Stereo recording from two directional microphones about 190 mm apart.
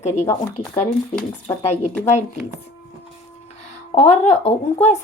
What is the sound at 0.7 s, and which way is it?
Speech, 10° left (ahead or behind).